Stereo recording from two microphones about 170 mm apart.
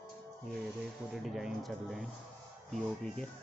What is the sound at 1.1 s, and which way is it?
Speech, centre (ahead or behind).